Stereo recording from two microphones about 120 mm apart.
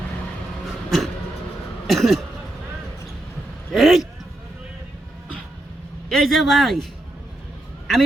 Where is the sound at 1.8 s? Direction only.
Centre (ahead or behind).